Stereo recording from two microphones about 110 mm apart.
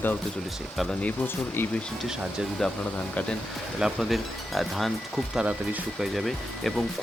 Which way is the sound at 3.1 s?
10° left (ahead or behind).